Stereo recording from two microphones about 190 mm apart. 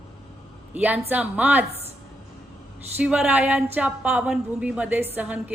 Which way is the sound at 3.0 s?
5° right (ahead or behind).